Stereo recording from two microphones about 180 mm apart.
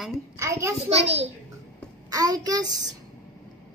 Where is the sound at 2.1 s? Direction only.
20° right (ahead or behind).